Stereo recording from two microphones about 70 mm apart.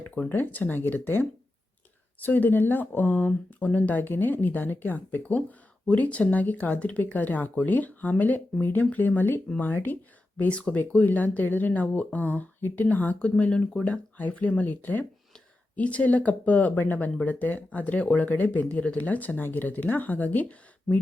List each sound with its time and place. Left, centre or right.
0.3 s speech: left